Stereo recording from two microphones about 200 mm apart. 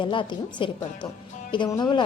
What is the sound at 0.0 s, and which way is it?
A woman's voice, 25° left (ahead or behind).